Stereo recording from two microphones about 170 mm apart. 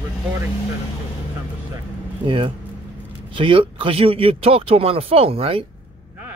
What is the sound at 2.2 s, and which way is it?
Speech, 30° right (ahead or behind).